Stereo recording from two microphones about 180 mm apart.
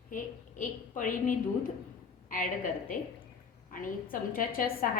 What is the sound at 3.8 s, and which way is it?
A woman's voice, 50° left (ahead or behind).